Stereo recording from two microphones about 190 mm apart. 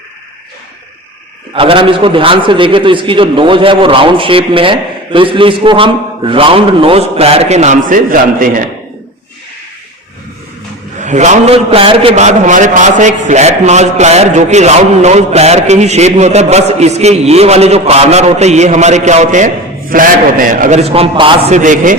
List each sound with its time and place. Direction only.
1.5 s a man's voice: 25° right (ahead or behind); by 8.7 s 45° right (ahead or behind)
11.0 s a man's voice: 40° right (ahead or behind)
21.5 s a man's voice: 45° right (ahead or behind)